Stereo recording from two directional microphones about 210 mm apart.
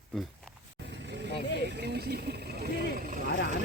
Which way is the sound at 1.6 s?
50° right (ahead or behind).